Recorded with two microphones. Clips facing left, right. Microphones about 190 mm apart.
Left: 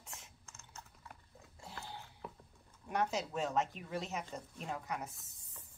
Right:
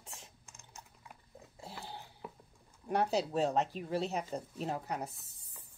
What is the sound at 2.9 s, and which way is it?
Speech, 35° right (ahead or behind).